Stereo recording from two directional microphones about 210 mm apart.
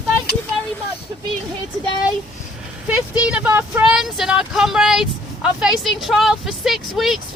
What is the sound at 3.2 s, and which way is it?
Speech, 5° right (ahead or behind).